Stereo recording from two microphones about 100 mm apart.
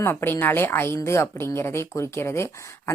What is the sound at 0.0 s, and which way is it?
Speech, 25° left (ahead or behind).